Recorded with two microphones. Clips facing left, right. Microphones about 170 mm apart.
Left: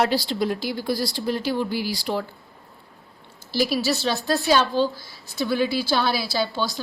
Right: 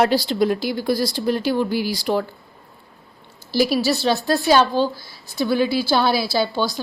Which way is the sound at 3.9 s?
40° right (ahead or behind).